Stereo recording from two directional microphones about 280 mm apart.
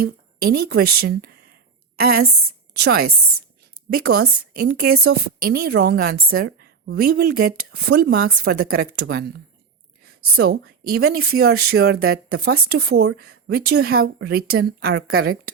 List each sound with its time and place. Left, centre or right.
0.0 s a woman's voice: right
4.1 s a woman's voice: right
8.6 s a woman's voice: right
9.0 s a woman's voice: right
10.2 s a woman's voice: right
10.5 s a woman's voice: right
11.9 s a woman's voice: right
12.9 s a woman's voice: right